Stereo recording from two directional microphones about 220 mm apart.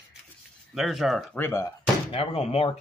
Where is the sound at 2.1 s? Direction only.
25° left (ahead or behind).